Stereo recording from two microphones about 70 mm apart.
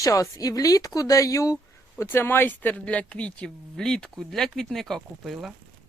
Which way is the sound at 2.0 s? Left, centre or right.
Left.